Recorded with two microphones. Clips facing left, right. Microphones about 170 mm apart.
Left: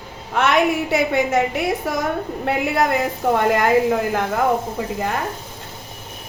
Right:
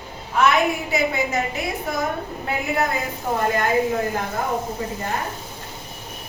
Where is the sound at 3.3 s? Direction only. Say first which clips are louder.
Left 3 dB; 80° left.